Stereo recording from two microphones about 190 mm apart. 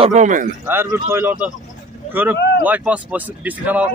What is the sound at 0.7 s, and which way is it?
Speech, 10° right (ahead or behind).